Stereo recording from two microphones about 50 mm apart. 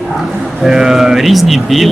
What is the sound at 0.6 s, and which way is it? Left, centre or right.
Speech, centre.